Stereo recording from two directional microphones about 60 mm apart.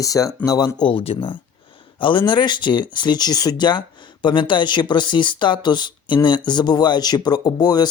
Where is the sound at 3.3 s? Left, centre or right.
Left.